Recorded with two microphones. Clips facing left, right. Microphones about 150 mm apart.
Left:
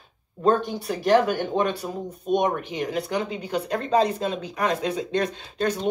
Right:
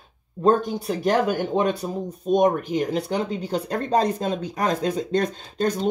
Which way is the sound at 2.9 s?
30° right (ahead or behind).